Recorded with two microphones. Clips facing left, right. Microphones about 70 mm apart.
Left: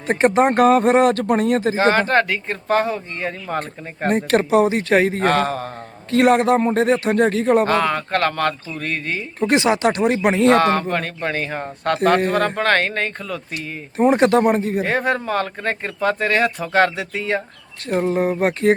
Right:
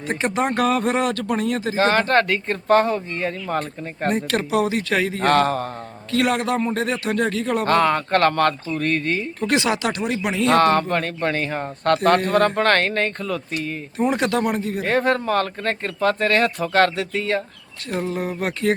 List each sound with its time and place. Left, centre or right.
0.1 s speech: left
1.8 s speech: centre
4.1 s speech: left
5.2 s speech: centre
6.1 s speech: left
7.7 s speech: centre
9.4 s speech: left
10.6 s speech: centre
14.0 s speech: left
14.8 s speech: centre
17.8 s speech: left